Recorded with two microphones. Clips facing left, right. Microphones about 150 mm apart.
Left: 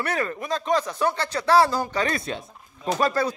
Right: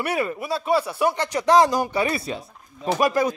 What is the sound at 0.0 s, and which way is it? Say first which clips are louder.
Speech: right 2 dB; 10° right (ahead or behind).